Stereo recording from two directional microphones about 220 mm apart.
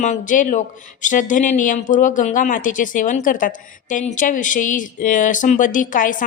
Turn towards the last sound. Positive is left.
turn(degrees=35)  # may be behind; listen again after turning